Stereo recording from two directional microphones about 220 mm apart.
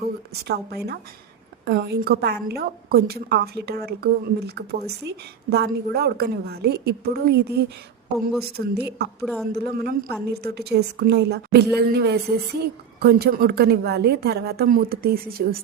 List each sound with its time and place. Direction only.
0.4 s a woman's voice: 45° right (ahead or behind)